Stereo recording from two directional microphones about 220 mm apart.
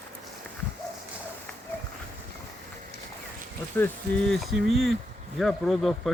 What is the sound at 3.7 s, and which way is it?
Speech, 5° left (ahead or behind).